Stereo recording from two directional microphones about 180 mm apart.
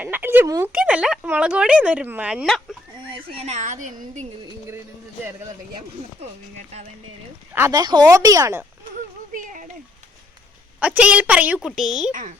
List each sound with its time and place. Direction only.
0.0 s a woman's voice: 10° right (ahead or behind)
3.0 s speech: 30° right (ahead or behind)
7.5 s speech: 15° right (ahead or behind)
9.3 s a sound: 45° right (ahead or behind)
10.8 s a woman's voice: 5° right (ahead or behind)